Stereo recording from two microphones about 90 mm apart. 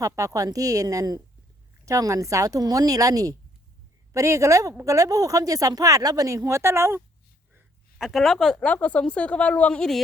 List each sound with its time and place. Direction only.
0.0 s speech: 40° right (ahead or behind)
7.9 s speech: centre (ahead or behind)